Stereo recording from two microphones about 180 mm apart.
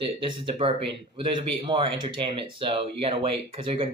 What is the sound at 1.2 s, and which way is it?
Speech, 25° right (ahead or behind).